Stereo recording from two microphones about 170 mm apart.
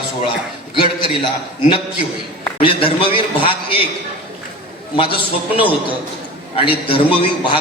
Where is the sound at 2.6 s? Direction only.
30° left (ahead or behind).